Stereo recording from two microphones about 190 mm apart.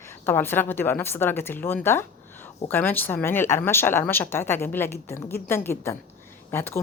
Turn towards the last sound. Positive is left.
turn(degrees=10)  # may be behind; listen again after turning